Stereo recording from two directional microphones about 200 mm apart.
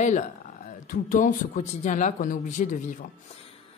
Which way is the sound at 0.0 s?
35° left (ahead or behind).